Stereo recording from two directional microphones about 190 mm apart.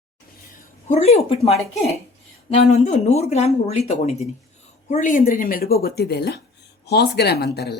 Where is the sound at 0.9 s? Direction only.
35° left (ahead or behind).